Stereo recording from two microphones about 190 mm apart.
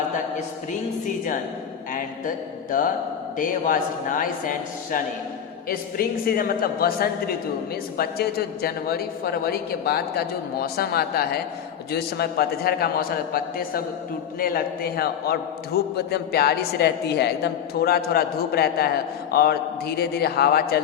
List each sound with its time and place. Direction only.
1.9 s a man's voice: 45° left (ahead or behind)